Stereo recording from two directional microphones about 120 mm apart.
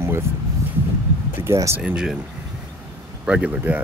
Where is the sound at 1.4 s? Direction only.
25° right (ahead or behind).